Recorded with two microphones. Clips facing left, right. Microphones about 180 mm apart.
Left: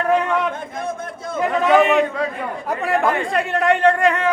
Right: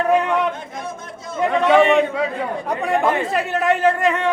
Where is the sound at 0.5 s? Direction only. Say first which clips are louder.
Left 4 dB; 55° left (ahead or behind).